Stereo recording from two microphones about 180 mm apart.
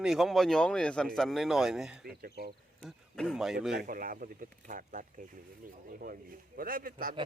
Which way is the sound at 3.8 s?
50° right (ahead or behind).